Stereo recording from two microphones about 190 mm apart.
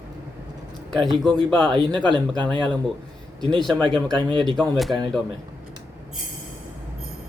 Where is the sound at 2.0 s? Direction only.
25° right (ahead or behind).